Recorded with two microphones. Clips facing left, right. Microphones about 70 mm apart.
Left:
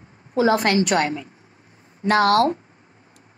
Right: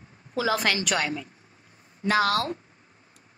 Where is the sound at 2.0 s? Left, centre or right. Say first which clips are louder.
Left 7 dB; left.